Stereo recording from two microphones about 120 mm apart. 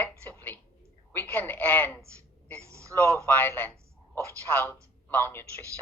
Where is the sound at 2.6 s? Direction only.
25° right (ahead or behind).